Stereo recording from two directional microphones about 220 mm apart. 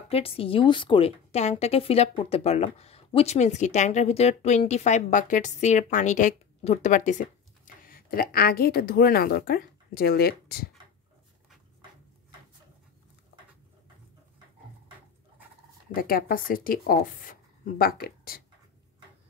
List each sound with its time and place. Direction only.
0.1 s a woman's voice: 25° left (ahead or behind); by 10.7 s 45° left (ahead or behind)
15.9 s speech: 40° left (ahead or behind)